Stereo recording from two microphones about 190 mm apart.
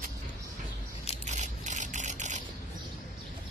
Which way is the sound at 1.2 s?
40° right (ahead or behind).